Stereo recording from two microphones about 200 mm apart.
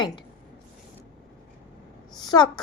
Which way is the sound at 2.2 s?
20° left (ahead or behind).